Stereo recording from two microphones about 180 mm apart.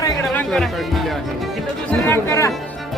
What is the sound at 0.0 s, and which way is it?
Music, 15° left (ahead or behind).